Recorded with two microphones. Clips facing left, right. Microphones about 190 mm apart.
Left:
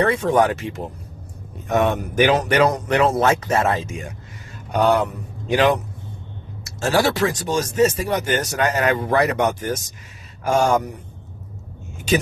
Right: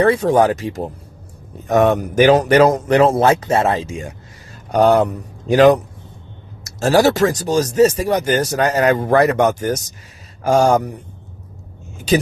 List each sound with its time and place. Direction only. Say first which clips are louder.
0.0 s speech: right 4 dB; 35° right (ahead or behind)
4.7 s speech: right 5 dB; 40° right (ahead or behind)